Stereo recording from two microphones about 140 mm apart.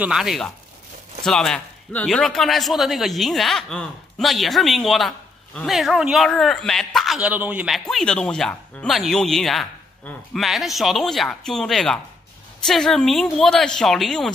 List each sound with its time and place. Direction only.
0.0 s speech: 5° right (ahead or behind)